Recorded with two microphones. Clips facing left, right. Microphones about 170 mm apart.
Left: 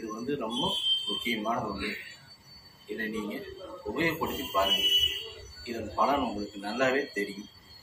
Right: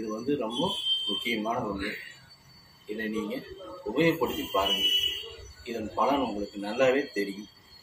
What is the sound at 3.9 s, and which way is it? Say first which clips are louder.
Speech: right 6 dB; 20° right (ahead or behind).